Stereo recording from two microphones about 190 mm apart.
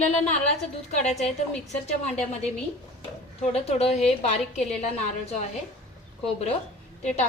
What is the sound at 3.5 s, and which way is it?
A woman's voice, 35° left (ahead or behind).